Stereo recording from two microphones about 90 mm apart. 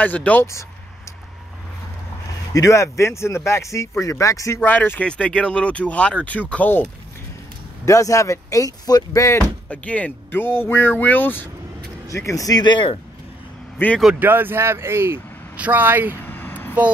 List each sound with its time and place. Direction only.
0.0 s speech: 15° left (ahead or behind)
2.5 s speech: 35° left (ahead or behind)
4.6 s speech: 20° left (ahead or behind)
7.8 s speech: 35° left (ahead or behind)
9.7 s speech: 15° left (ahead or behind)
12.1 s speech: 35° left (ahead or behind); by 12.9 s 60° left (ahead or behind)
13.8 s speech: 25° left (ahead or behind)
14.2 s speech: 25° right (ahead or behind)
15.5 s speech: 15° right (ahead or behind)
16.3 s a sound: 20° left (ahead or behind)